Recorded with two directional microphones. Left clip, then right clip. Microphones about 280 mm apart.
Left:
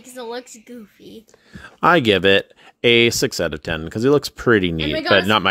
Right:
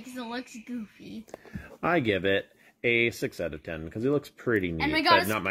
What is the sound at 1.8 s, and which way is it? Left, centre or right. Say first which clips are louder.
A woman's voice: left 12 dB; left.